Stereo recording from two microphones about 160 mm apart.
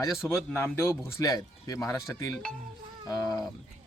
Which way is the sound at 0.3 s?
15° left (ahead or behind).